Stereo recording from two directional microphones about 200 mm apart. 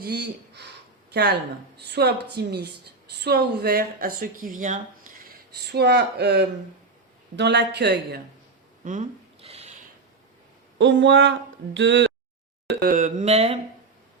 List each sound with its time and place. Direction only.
0.0 s speech: 55° right (ahead or behind)
1.9 s a woman's voice: 55° right (ahead or behind)
5.3 s speech: 55° right (ahead or behind)
8.8 s a sound: 40° right (ahead or behind)
10.8 s speech: 65° right (ahead or behind)
12.8 s a sound: 45° right (ahead or behind)